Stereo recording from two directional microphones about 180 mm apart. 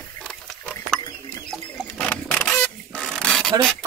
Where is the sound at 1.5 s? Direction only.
5° left (ahead or behind).